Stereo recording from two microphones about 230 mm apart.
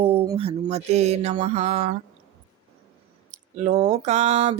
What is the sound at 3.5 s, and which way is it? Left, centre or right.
Mantra, right.